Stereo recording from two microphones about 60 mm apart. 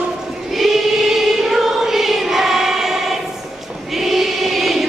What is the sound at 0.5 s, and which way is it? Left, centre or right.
Choir, centre.